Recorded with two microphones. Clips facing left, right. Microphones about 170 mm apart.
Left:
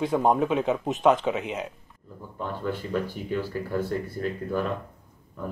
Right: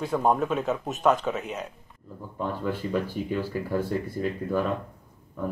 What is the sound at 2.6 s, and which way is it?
Speech, 10° right (ahead or behind).